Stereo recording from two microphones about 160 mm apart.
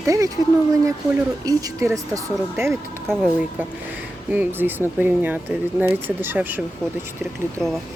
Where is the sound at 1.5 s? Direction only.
20° right (ahead or behind).